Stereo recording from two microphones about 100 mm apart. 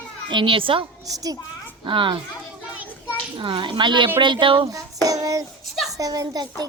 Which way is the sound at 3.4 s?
55° right (ahead or behind).